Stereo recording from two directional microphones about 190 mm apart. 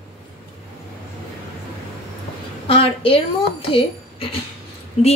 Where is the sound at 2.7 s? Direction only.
30° left (ahead or behind).